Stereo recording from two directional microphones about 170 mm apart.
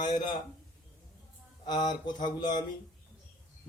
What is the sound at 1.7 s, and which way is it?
Speech, 25° left (ahead or behind).